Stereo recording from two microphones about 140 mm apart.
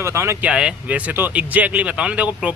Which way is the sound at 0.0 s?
20° right (ahead or behind).